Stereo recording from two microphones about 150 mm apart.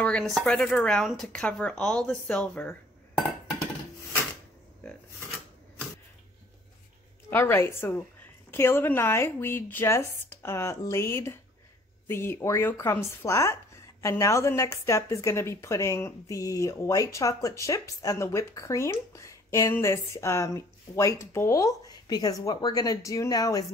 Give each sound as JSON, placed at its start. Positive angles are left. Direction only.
{"t": 0.0, "sound": "speech", "side_deg": 5}
{"t": 7.2, "sound": "a woman's voice", "side_deg": 15}